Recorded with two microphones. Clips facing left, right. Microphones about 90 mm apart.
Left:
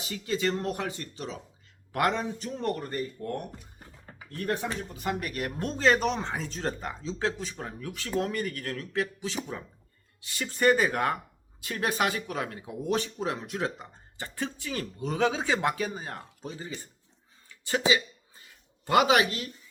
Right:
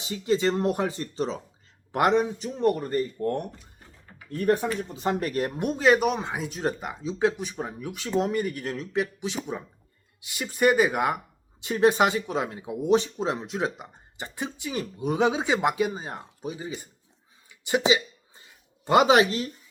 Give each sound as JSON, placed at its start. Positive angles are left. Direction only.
{"t": 0.0, "sound": "speech", "side_deg": -25}
{"t": 1.9, "sound": "speech", "side_deg": -20}
{"t": 2.9, "sound": "speech", "side_deg": -40}
{"t": 4.9, "sound": "speech", "side_deg": -30}
{"t": 5.5, "sound": "speech", "side_deg": -15}
{"t": 11.6, "sound": "speech", "side_deg": -25}
{"t": 17.5, "sound": "a sound", "side_deg": -15}